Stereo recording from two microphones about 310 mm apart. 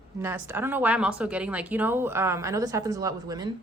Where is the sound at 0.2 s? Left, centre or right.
Centre.